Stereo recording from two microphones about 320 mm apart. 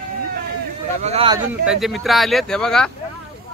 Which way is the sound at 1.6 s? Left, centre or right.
Centre.